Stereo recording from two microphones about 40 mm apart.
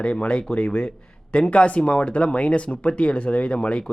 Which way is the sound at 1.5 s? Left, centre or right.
Left.